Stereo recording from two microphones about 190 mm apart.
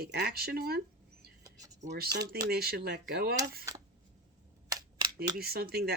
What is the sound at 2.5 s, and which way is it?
Speech, 55° right (ahead or behind).